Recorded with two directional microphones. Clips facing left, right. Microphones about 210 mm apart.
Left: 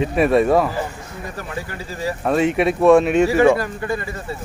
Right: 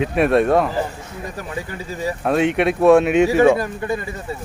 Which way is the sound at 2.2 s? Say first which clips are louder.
Even; centre (ahead or behind).